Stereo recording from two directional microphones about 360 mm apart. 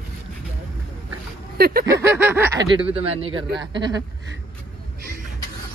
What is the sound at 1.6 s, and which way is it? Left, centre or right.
Speech, right.